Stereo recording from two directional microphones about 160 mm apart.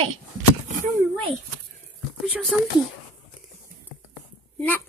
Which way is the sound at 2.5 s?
5° right (ahead or behind).